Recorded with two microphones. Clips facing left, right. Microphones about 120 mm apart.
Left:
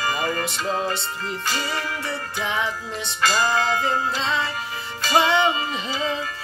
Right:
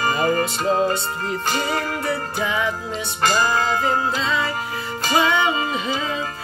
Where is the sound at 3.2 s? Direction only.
50° right (ahead or behind).